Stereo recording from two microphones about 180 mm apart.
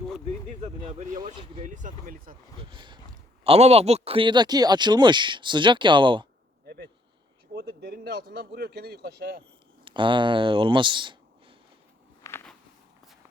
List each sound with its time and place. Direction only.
0.6 s speech: 40° right (ahead or behind)
1.6 s speech: 45° right (ahead or behind)
2.6 s speech: 25° right (ahead or behind)
7.5 s speech: 60° right (ahead or behind)
9.8 s speech: 25° right (ahead or behind)
12.2 s a sound: 15° left (ahead or behind)